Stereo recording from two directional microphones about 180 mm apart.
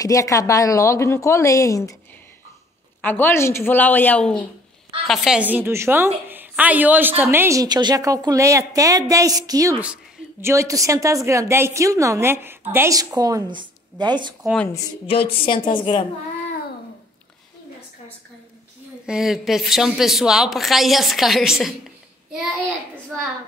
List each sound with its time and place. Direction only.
0.0 s speech: 20° left (ahead or behind)
3.0 s a woman's voice: 10° left (ahead or behind); by 14.3 s 25° right (ahead or behind)
14.4 s a woman's voice: centre (ahead or behind)
15.4 s a woman's voice: 25° left (ahead or behind)
19.0 s a woman's voice: centre (ahead or behind)